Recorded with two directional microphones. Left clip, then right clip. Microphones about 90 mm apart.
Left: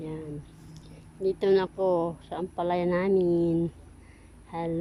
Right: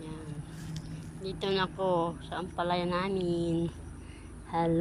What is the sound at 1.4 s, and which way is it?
A woman's voice, 85° left.